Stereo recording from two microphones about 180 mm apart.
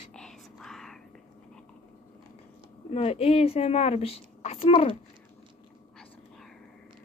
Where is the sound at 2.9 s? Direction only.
35° left (ahead or behind).